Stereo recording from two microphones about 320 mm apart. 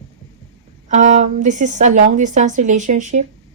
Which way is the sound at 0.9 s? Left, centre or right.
Right.